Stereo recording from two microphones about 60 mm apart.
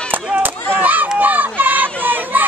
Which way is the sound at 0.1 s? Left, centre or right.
Right.